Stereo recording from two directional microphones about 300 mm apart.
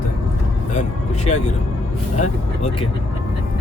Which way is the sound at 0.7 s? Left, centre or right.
Left.